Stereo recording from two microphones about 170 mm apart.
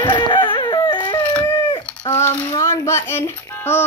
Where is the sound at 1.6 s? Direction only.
30° left (ahead or behind).